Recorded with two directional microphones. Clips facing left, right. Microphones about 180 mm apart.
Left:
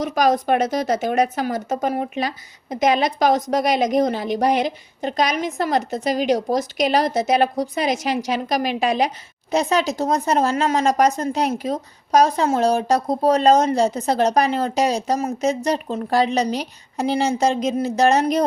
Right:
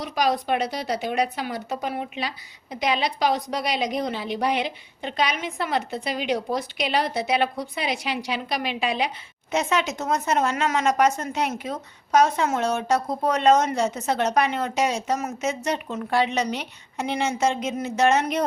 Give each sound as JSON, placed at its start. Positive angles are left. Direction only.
{"t": 0.0, "sound": "speech", "side_deg": 45}